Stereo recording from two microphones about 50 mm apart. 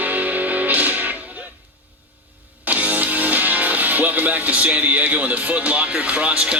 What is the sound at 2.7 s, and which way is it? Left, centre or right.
Speech, right.